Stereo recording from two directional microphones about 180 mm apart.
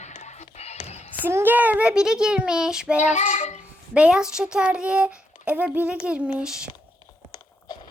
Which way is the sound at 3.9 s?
5° right (ahead or behind).